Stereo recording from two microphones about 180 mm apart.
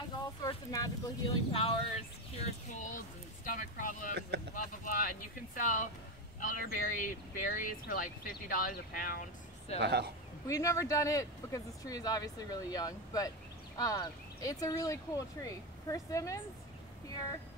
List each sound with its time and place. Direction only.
0.4 s a sound: 20° left (ahead or behind)
1.5 s speech: 30° left (ahead or behind); by 9.3 s 50° left (ahead or behind)
9.8 s speech: 65° right (ahead or behind)
10.4 s speech: 15° left (ahead or behind)